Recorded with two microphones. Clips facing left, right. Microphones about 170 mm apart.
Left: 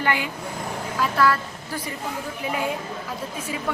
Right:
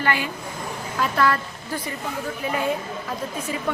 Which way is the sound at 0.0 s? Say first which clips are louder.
Even; 15° left (ahead or behind).